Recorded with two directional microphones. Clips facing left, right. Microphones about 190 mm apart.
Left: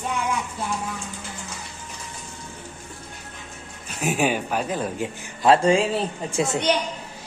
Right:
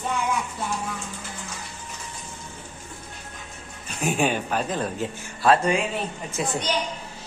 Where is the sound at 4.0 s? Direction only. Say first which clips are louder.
Left 1 dB; 5° left (ahead or behind).